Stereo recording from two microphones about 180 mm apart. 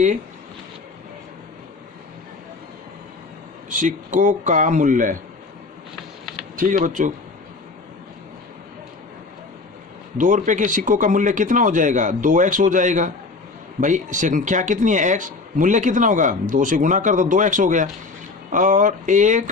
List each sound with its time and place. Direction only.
3.7 s speech: 45° right (ahead or behind)
6.6 s speech: 50° right (ahead or behind)
10.2 s speech: 45° right (ahead or behind)